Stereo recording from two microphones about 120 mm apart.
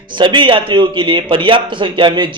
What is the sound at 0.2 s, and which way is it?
A man's voice, 40° right (ahead or behind).